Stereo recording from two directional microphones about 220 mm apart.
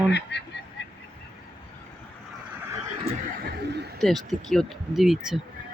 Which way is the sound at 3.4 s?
50° right (ahead or behind).